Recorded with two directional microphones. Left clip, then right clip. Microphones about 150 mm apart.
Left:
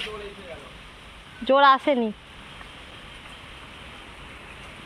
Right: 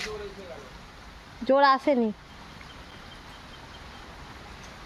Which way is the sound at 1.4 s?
25° right (ahead or behind).